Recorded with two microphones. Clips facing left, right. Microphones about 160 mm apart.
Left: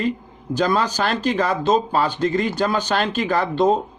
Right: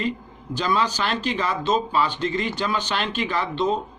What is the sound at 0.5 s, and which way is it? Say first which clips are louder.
Speech: left 4 dB; 45° left (ahead or behind).